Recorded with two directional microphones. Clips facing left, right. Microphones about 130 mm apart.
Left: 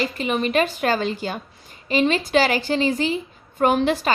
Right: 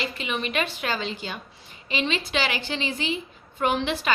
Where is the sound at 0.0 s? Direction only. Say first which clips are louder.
Left 7 dB; 40° left (ahead or behind).